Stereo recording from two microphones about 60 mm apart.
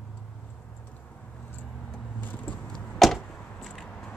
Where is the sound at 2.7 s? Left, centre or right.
Centre.